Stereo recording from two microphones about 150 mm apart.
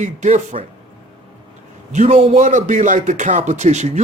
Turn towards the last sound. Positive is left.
turn(degrees=-50)  # may be behind; listen again after turning